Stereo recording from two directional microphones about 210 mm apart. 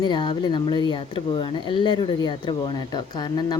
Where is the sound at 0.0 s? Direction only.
20° left (ahead or behind).